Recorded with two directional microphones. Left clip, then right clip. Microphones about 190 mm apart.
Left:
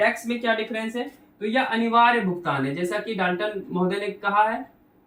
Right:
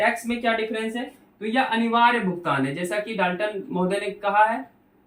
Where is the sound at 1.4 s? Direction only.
20° left (ahead or behind).